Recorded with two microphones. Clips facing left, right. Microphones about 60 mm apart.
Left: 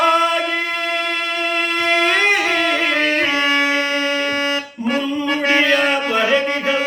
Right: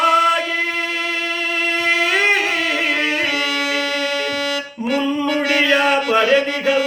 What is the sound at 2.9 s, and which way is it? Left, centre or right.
Music, left.